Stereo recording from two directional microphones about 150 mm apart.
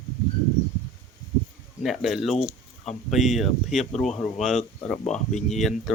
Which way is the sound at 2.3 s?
45° left (ahead or behind).